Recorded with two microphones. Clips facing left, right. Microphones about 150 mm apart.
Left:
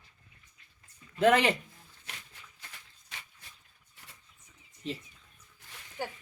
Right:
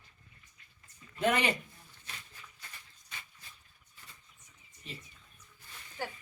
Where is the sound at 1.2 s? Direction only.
90° left.